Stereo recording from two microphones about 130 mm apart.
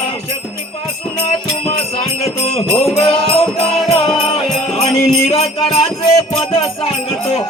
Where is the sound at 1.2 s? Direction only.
50° left (ahead or behind).